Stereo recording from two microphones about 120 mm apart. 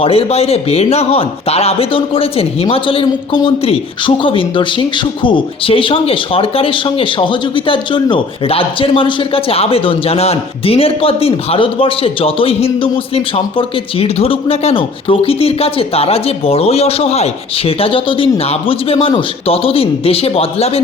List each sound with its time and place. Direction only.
0.0 s a man's voice: 55° left (ahead or behind)